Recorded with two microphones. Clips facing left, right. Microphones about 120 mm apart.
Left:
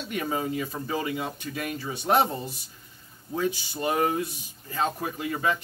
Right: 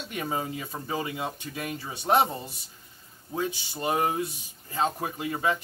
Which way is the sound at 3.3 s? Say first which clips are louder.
Left 3 dB; 25° right (ahead or behind).